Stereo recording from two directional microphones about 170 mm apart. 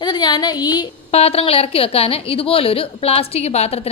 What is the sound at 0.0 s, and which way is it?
Speech, 25° left (ahead or behind).